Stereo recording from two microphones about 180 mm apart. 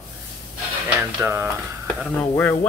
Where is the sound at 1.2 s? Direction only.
15° right (ahead or behind).